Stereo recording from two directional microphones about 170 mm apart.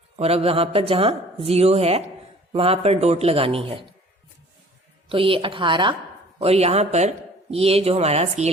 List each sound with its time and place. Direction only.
0.2 s speech: 35° right (ahead or behind)
5.0 s speech: 30° right (ahead or behind)